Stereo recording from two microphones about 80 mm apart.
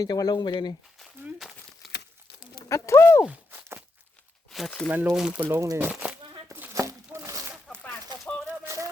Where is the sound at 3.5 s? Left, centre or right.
Right.